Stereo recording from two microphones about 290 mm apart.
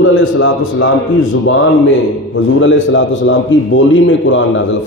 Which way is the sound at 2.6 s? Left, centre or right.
Left.